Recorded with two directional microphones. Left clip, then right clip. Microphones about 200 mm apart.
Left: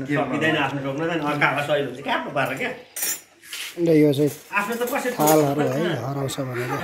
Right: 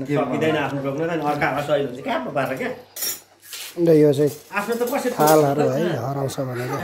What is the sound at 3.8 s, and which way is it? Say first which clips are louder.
A child's voice: right 3 dB; 15° right (ahead or behind).